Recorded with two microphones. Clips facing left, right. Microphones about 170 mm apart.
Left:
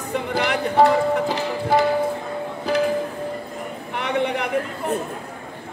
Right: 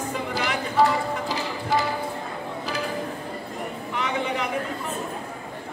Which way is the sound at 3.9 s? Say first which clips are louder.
Left 5 dB; 65° left (ahead or behind).